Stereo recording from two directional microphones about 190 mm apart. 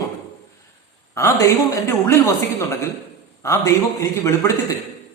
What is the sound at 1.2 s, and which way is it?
A man's voice, 15° left (ahead or behind).